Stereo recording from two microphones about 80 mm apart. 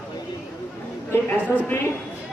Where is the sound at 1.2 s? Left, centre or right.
Left.